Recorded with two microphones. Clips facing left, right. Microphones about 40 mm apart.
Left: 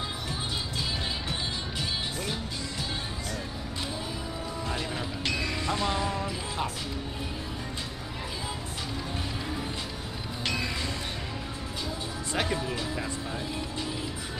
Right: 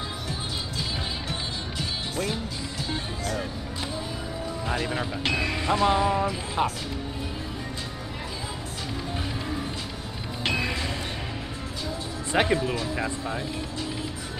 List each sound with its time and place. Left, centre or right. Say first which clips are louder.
4.6 s speech: right 6 dB; right
10.4 s music: right 4 dB; right
12.3 s speech: right 7 dB; right